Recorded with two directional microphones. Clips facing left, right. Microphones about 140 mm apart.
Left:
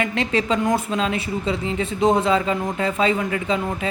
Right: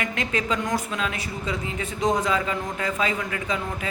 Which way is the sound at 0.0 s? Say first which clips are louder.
Left 5 dB; 25° left (ahead or behind).